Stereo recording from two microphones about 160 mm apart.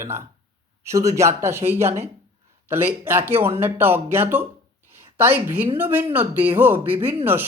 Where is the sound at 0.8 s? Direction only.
20° right (ahead or behind).